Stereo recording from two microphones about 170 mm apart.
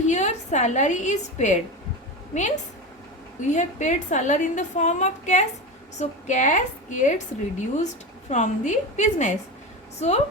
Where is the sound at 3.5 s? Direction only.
45° left (ahead or behind).